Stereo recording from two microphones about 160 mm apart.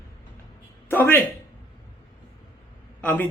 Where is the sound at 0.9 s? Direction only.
15° left (ahead or behind).